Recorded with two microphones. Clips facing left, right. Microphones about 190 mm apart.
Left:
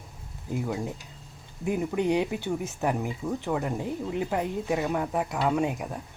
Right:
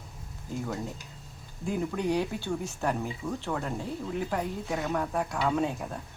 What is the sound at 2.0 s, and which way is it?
Speech, 20° left (ahead or behind).